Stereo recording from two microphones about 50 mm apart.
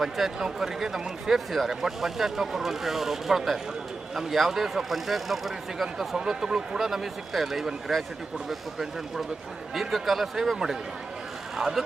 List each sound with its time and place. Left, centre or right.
0.0 s speech: centre